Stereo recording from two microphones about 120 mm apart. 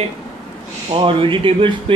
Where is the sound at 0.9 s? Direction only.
50° right (ahead or behind).